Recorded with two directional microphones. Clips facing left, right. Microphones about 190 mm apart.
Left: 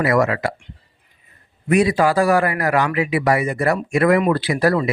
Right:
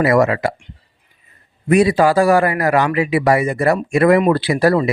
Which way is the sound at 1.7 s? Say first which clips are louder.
Right 3 dB; 30° right (ahead or behind).